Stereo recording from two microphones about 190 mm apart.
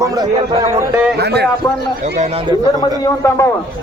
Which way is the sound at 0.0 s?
20° right (ahead or behind).